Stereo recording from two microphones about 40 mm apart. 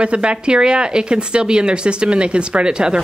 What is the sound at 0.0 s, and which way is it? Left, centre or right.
Speech, right.